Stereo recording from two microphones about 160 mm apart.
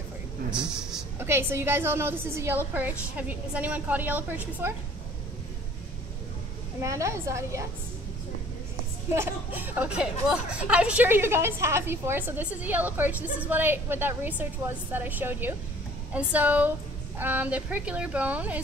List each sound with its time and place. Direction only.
0.5 s a sound: 5° right (ahead or behind)
1.2 s a woman's voice: 15° right (ahead or behind)
6.8 s a woman's voice: 20° right (ahead or behind)
9.1 s a woman's voice: 15° right (ahead or behind)